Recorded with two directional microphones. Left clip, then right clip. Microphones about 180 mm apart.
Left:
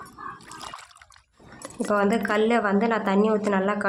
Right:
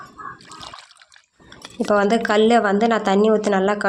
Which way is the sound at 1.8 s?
30° right (ahead or behind).